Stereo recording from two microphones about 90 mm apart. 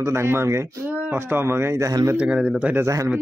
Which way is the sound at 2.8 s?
35° right (ahead or behind).